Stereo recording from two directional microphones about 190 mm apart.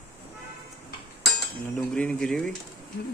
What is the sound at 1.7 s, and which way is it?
Speech, 5° left (ahead or behind).